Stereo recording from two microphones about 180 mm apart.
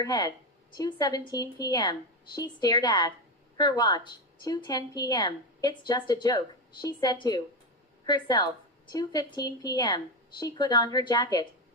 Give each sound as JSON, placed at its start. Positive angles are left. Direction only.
{"t": 0.0, "sound": "a woman's voice", "side_deg": 20}